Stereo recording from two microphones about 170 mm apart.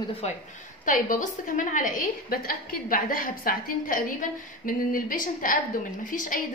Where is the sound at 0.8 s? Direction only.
50° left (ahead or behind).